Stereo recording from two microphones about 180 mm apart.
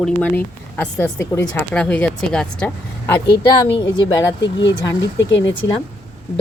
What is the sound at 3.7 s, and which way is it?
Speech, 25° left (ahead or behind).